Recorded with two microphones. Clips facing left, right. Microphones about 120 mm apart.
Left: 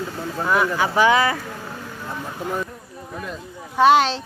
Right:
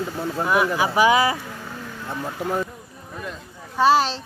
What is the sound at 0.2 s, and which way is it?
Speech, 10° right (ahead or behind).